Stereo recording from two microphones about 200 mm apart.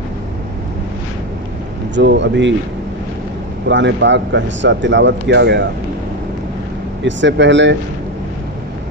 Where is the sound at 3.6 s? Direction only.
65° right (ahead or behind).